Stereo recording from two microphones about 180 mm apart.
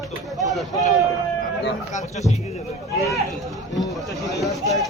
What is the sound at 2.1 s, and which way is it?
Speech, 40° left (ahead or behind).